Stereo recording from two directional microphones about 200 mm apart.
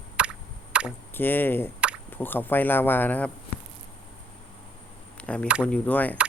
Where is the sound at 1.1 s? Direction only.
10° left (ahead or behind).